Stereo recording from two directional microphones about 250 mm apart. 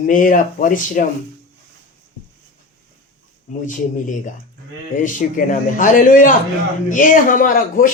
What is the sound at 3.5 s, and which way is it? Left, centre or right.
Speech, left.